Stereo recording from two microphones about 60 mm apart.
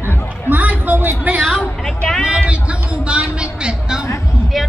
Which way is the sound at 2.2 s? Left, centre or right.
Centre.